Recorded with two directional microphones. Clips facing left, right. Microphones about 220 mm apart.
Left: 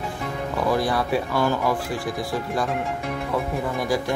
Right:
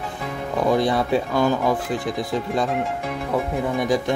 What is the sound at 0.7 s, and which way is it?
Speech, 20° right (ahead or behind).